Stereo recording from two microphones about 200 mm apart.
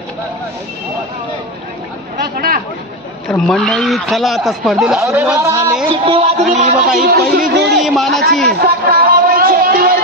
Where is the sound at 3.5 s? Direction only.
Centre (ahead or behind).